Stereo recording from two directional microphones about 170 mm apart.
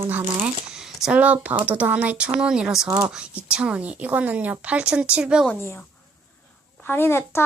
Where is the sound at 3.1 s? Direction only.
5° right (ahead or behind).